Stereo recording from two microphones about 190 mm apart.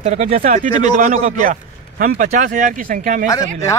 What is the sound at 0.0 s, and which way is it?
A man's voice, 35° right (ahead or behind).